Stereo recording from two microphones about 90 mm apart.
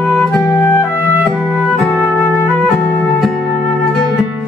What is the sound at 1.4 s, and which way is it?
Music, 10° right (ahead or behind).